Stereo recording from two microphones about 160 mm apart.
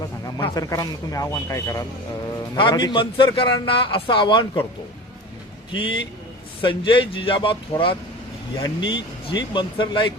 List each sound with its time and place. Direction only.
0.4 s speech: 20° left (ahead or behind)
2.6 s a man's voice: 30° left (ahead or behind)
5.7 s a man's voice: 30° left (ahead or behind)